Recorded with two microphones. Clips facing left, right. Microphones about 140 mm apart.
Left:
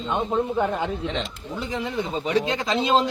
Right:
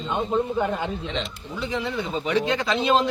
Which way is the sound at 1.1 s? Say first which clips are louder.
Even; 40° left (ahead or behind).